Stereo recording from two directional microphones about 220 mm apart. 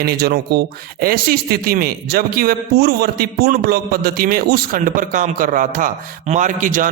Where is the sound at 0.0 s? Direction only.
45° right (ahead or behind).